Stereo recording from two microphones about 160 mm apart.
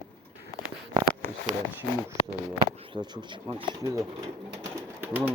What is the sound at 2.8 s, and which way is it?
Speech, 30° right (ahead or behind).